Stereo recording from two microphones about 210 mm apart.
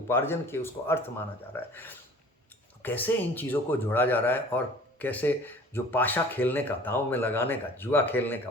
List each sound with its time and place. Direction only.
0.1 s speech: 10° left (ahead or behind)